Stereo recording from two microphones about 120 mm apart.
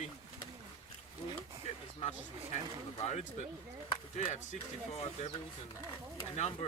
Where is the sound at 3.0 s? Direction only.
75° left (ahead or behind).